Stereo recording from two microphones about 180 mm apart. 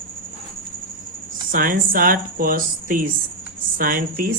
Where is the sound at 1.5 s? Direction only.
50° right (ahead or behind).